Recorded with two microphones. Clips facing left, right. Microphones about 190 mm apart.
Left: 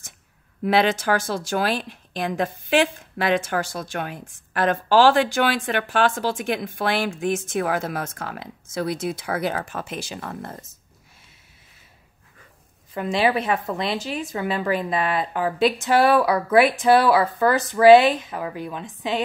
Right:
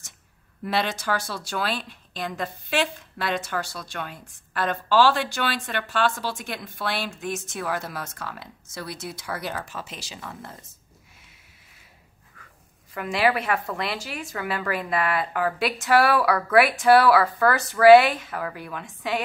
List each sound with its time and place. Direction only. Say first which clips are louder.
0.7 s speech: left 6 dB; 55° left (ahead or behind)
12.9 s speech: left 2 dB; 25° left (ahead or behind)